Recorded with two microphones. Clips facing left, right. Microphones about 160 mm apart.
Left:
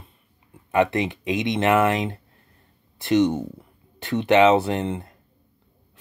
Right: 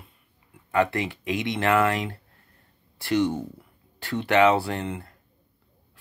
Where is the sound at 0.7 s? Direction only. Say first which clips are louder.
Left 3 dB; 20° left (ahead or behind).